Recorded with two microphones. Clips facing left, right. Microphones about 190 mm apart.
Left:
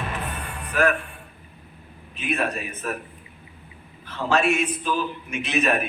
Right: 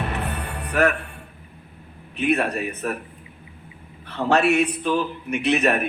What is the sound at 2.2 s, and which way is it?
Speech, 65° right (ahead or behind).